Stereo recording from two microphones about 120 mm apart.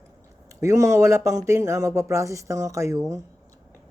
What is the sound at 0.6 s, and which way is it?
Speech, 25° right (ahead or behind).